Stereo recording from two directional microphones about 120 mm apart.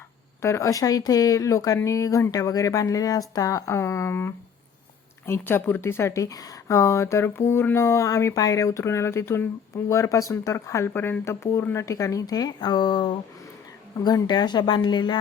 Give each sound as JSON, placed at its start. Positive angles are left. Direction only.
{"t": 0.4, "sound": "speech", "side_deg": 25}